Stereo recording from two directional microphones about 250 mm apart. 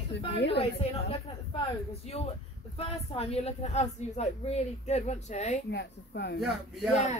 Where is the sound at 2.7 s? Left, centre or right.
Left.